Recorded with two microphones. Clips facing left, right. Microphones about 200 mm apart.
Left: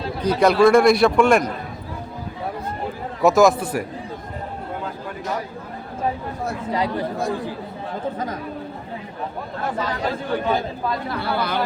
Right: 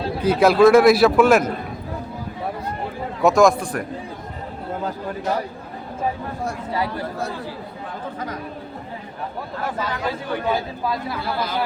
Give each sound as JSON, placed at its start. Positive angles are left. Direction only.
{"t": 0.2, "sound": "a man's voice", "side_deg": -5}
{"t": 3.2, "sound": "a man's voice", "side_deg": 0}
{"t": 6.7, "sound": "speech", "side_deg": 20}
{"t": 10.5, "sound": "speech", "side_deg": -5}
{"t": 11.2, "sound": "speech", "side_deg": 65}